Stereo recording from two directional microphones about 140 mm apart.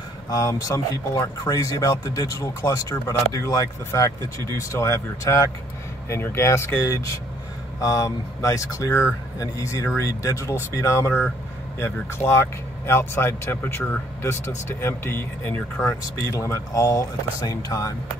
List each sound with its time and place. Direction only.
0.3 s speech: 25° left (ahead or behind)